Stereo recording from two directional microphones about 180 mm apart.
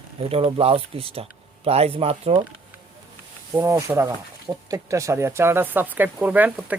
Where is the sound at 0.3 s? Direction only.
35° right (ahead or behind).